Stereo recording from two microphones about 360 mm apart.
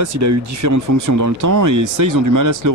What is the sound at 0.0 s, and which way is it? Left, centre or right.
Speech, right.